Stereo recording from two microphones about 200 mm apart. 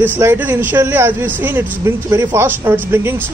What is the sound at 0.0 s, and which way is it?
A man's voice, 10° right (ahead or behind).